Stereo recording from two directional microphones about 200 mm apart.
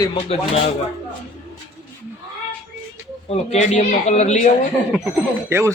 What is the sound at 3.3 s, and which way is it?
Speech, 35° left (ahead or behind).